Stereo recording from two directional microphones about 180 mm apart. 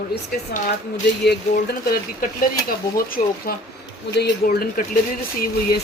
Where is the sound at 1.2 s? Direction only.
65° left (ahead or behind).